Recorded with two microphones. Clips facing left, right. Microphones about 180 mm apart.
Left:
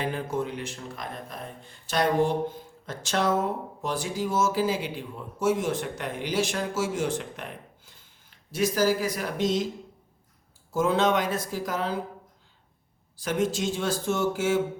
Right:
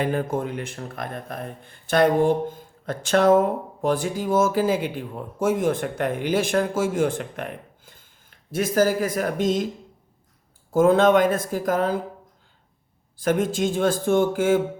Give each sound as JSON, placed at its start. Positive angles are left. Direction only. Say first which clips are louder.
{"t": 0.0, "sound": "speech", "louder": "right 5 dB", "side_deg": -50}
{"t": 10.7, "sound": "speech", "louder": "right 7 dB", "side_deg": -50}
{"t": 13.1, "sound": "speech", "louder": "right 5 dB", "side_deg": -50}